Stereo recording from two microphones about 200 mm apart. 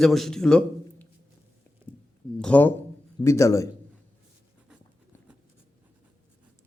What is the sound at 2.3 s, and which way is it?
Speech, 5° left (ahead or behind).